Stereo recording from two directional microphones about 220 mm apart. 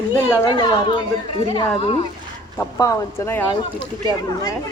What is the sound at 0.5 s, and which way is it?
Speech, 20° left (ahead or behind).